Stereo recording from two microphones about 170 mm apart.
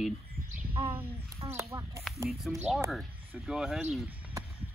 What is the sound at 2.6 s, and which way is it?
Speech, 15° right (ahead or behind).